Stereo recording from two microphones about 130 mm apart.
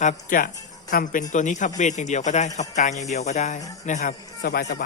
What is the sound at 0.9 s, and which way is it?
Speech, 90° left.